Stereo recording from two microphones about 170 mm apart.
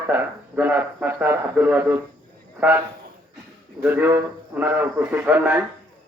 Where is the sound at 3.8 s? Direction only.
10° right (ahead or behind).